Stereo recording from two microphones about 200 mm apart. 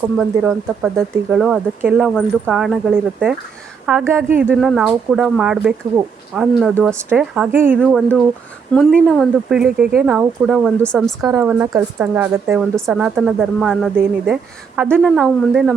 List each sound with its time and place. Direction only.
0.2 s speech: 5° right (ahead or behind)
11.3 s speech: 15° right (ahead or behind)